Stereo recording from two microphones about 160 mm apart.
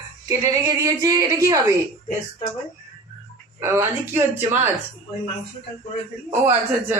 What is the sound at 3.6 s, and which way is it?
Speech, 15° right (ahead or behind).